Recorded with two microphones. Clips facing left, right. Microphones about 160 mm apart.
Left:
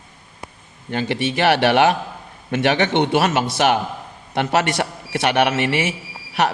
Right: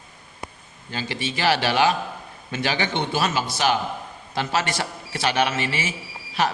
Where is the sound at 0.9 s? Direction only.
60° left (ahead or behind).